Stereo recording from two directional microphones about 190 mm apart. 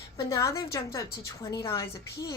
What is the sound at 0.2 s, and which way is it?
A woman's voice, 15° left (ahead or behind).